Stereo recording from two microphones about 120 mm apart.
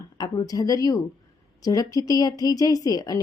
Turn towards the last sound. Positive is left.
turn(degrees=30)  # may be behind; listen again after turning